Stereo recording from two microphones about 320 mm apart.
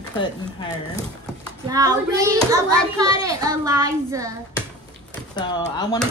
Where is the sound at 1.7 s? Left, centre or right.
Centre.